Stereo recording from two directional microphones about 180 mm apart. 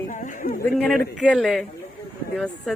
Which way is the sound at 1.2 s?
Centre (ahead or behind).